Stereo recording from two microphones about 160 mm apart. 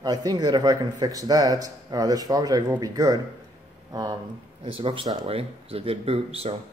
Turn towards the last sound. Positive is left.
turn(degrees=-40)  # may be behind; listen again after turning